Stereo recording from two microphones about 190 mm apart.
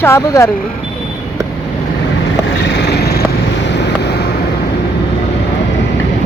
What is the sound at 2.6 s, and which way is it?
Vehicle, 65° left (ahead or behind).